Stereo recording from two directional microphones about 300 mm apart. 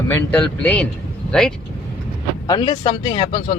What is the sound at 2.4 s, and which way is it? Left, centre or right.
Speech, centre.